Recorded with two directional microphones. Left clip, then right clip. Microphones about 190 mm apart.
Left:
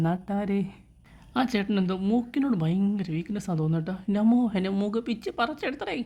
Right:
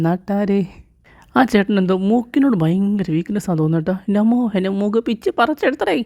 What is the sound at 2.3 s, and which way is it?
A woman's voice, 30° right (ahead or behind).